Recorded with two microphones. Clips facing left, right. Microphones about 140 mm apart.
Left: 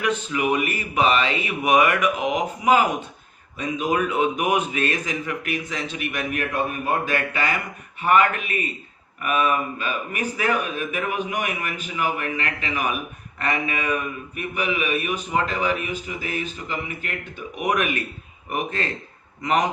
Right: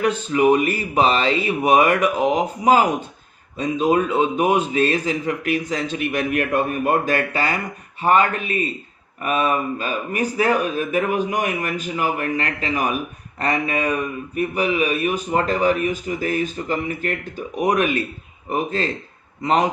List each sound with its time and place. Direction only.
0.0 s a man's voice: 35° right (ahead or behind)